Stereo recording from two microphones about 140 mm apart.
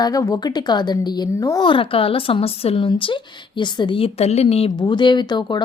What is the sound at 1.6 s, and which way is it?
A woman's voice, 40° left (ahead or behind).